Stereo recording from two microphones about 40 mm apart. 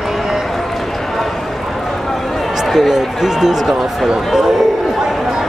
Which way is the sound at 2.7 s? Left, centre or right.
Centre.